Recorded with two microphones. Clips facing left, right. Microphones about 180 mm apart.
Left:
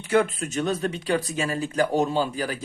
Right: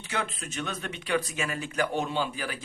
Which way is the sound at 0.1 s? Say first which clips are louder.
Left 12 dB; 50° left (ahead or behind).